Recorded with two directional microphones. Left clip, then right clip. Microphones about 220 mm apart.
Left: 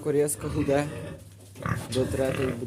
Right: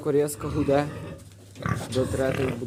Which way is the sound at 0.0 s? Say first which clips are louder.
Right 1 dB; 5° left (ahead or behind).